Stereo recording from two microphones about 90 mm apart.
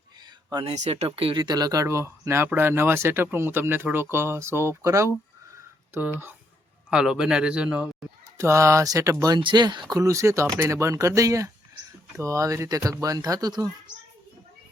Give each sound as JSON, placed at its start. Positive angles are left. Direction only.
{"t": 0.6, "sound": "speech", "side_deg": -90}
{"t": 1.4, "sound": "speech", "side_deg": -50}
{"t": 6.9, "sound": "a man's voice", "side_deg": -10}
{"t": 8.4, "sound": "speech", "side_deg": -35}
{"t": 9.4, "sound": "speech", "side_deg": -55}
{"t": 9.9, "sound": "speech", "side_deg": -35}